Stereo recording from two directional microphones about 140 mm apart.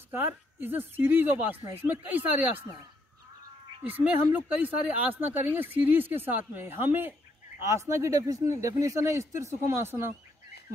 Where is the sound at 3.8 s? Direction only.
10° right (ahead or behind).